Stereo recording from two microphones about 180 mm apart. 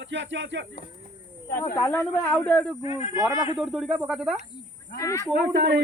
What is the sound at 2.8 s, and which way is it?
Speech, 30° left (ahead or behind).